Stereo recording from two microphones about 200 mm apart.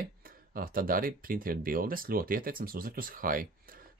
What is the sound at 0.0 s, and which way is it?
Speech, 45° right (ahead or behind).